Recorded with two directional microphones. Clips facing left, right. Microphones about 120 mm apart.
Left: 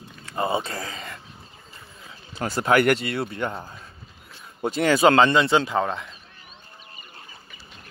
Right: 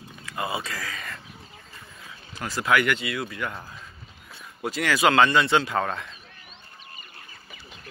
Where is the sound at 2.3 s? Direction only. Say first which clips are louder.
Left 3 dB; 30° left (ahead or behind).